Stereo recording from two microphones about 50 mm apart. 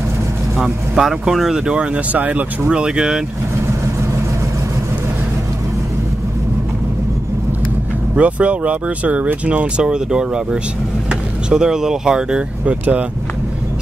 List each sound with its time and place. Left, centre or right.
0.6 s speech: centre
2.1 s speech: right
2.7 s speech: centre
3.8 s vehicle: right
8.2 s speech: right